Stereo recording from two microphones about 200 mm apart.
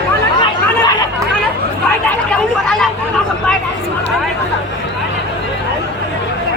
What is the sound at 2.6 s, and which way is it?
Hubbub, 5° left (ahead or behind).